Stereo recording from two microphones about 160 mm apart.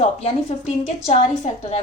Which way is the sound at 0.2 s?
40° left (ahead or behind).